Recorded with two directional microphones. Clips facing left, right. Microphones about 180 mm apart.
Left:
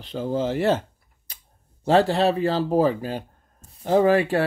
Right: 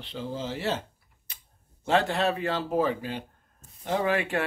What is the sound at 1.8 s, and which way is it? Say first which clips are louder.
Speech: left 6 dB; 35° left (ahead or behind).